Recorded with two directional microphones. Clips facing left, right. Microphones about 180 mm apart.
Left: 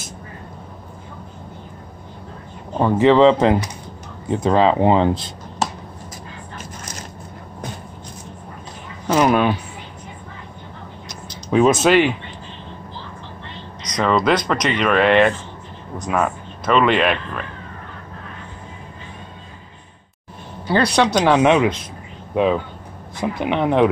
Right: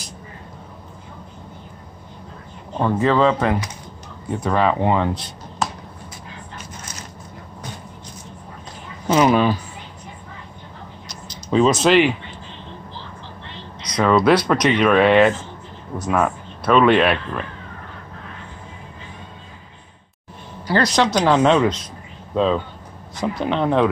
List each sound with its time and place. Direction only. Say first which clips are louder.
2.8 s speech: left 4 dB; 20° left (ahead or behind)
9.0 s speech: even; centre (ahead or behind)
11.8 s speech: right 1 dB; 5° left (ahead or behind)
13.8 s speech: right 2 dB; 5° right (ahead or behind)
20.6 s speech: left 1 dB; 15° left (ahead or behind)